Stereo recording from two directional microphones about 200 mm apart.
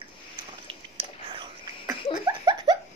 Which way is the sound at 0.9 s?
25° right (ahead or behind).